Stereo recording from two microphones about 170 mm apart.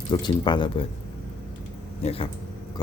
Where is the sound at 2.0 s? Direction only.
35° left (ahead or behind).